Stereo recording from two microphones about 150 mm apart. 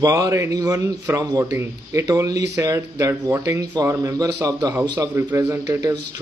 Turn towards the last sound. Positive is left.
turn(degrees=-25)  # may be behind; listen again after turning